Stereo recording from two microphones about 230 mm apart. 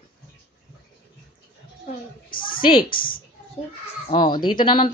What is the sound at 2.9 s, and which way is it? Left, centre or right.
Speech, left.